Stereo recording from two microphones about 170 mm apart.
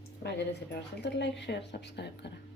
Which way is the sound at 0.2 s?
75° left (ahead or behind).